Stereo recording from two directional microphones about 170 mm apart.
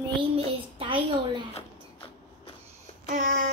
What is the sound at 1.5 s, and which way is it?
Creak, 30° left (ahead or behind).